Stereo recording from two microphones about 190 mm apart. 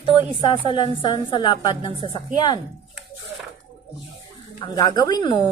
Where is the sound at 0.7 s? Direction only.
25° left (ahead or behind).